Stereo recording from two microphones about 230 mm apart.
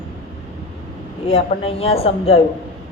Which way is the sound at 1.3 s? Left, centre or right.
Left.